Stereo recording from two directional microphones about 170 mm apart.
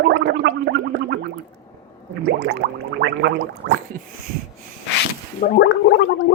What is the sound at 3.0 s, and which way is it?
Gargling, 90° right.